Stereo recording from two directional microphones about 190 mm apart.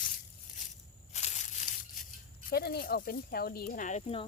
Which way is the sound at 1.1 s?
35° left (ahead or behind).